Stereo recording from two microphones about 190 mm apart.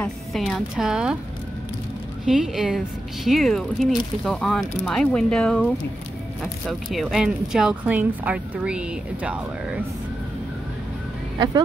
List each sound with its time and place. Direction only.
0.0 s speech: centre (ahead or behind)
2.2 s speech: centre (ahead or behind)
11.3 s speech: 20° right (ahead or behind)